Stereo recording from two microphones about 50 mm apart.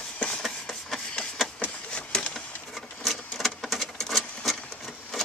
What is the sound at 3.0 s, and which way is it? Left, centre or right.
Sewing machine, centre.